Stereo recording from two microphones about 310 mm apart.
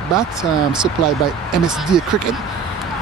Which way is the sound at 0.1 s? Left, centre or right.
Centre.